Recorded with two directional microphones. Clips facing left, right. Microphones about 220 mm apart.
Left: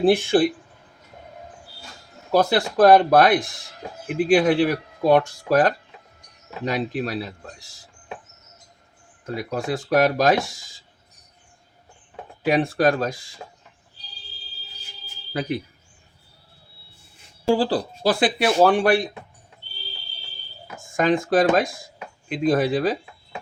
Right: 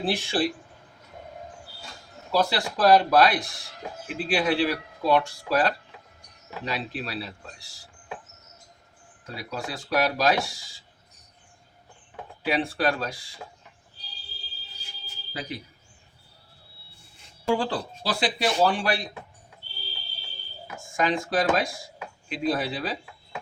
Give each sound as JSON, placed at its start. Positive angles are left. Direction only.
{"t": 0.0, "sound": "speech", "side_deg": 50}
{"t": 2.3, "sound": "speech", "side_deg": 50}
{"t": 9.2, "sound": "speech", "side_deg": 50}
{"t": 12.5, "sound": "speech", "side_deg": 45}
{"t": 15.3, "sound": "speech", "side_deg": 55}
{"t": 17.4, "sound": "speech", "side_deg": 30}
{"t": 18.0, "sound": "speech", "side_deg": 55}
{"t": 20.9, "sound": "speech", "side_deg": 50}